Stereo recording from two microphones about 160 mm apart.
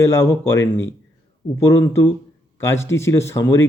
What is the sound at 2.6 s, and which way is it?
Speech, 15° left (ahead or behind).